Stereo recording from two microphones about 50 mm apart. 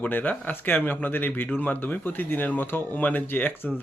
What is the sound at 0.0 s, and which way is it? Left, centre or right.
A man's voice, left.